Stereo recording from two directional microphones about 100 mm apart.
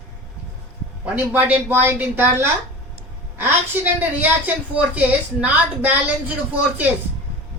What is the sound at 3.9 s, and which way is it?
A woman's voice, 15° right (ahead or behind).